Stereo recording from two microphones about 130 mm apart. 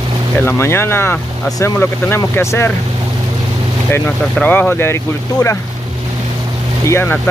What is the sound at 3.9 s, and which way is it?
Speech, 15° left (ahead or behind).